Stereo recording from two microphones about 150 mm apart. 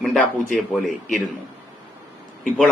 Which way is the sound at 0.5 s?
Centre (ahead or behind).